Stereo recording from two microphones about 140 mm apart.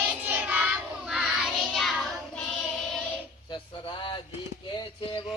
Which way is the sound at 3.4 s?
35° left (ahead or behind).